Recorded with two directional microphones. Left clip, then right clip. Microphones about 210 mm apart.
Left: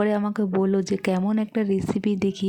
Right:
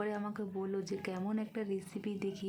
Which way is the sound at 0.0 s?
35° left (ahead or behind).